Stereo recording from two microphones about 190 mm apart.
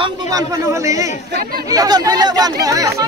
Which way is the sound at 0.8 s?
15° right (ahead or behind).